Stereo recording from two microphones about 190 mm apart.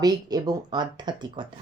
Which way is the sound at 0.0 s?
20° right (ahead or behind).